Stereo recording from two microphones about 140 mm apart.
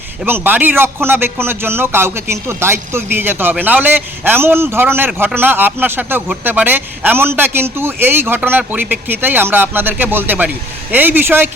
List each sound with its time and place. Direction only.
0.3 s a man's voice: 15° right (ahead or behind)